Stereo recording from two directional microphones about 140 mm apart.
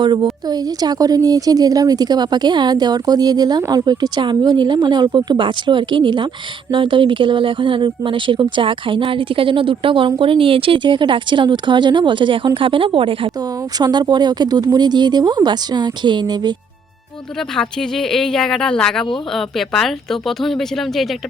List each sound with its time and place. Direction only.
0.0 s a woman's voice: 35° right (ahead or behind)
17.5 s speech: 5° left (ahead or behind)